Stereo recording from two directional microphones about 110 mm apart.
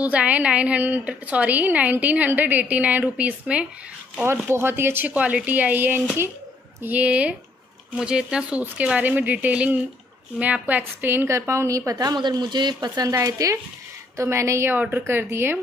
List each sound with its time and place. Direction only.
0.0 s a woman's voice: 10° right (ahead or behind)
4.2 s a woman's voice: 20° right (ahead or behind)